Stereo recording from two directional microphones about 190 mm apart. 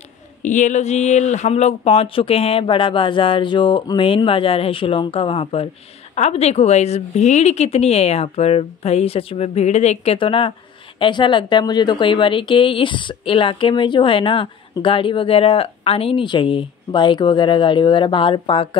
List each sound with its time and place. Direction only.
0.4 s a woman's voice: 40° left (ahead or behind)